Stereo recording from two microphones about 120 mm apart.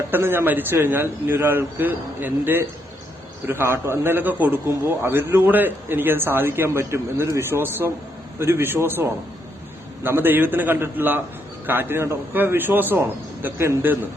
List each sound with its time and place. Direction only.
0.1 s a man's voice: 20° right (ahead or behind)